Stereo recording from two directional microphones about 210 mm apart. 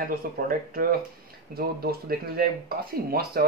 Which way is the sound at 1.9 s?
45° right (ahead or behind).